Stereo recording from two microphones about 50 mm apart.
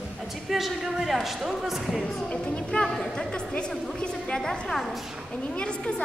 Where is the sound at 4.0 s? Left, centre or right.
Left.